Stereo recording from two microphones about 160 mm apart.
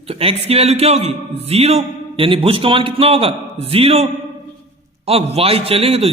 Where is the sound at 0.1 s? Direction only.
40° right (ahead or behind).